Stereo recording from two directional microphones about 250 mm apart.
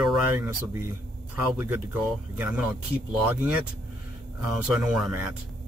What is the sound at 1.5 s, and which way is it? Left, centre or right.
Speech, centre.